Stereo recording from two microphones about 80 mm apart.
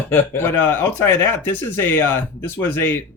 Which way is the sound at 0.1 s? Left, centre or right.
Left.